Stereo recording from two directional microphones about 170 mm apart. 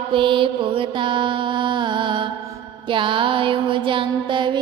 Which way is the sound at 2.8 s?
30° right (ahead or behind).